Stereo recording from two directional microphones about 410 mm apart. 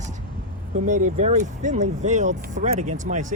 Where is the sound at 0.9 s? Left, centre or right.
Centre.